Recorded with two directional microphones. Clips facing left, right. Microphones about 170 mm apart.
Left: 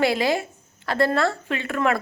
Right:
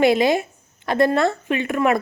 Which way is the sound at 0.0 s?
20° right (ahead or behind).